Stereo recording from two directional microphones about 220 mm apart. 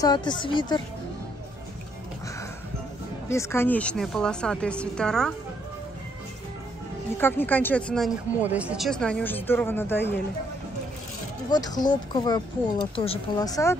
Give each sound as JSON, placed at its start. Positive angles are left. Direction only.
{"t": 0.0, "sound": "speech", "side_deg": 20}
{"t": 3.3, "sound": "a woman's voice", "side_deg": 10}
{"t": 7.2, "sound": "speech", "side_deg": 10}
{"t": 11.5, "sound": "speech", "side_deg": 20}